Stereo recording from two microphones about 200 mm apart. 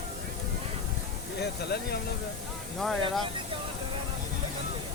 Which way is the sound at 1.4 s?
55° left (ahead or behind).